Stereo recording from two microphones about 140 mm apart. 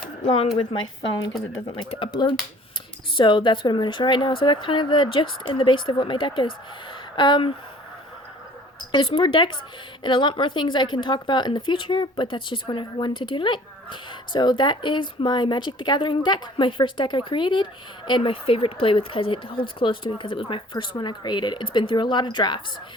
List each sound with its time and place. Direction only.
0.5 s a woman's voice: 35° left (ahead or behind)
8.9 s a woman's voice: 35° left (ahead or behind)